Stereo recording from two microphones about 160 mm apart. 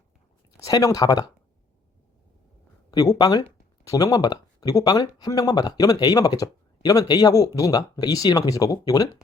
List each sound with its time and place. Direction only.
0.5 s speech: 20° left (ahead or behind)
2.9 s speech: 25° left (ahead or behind)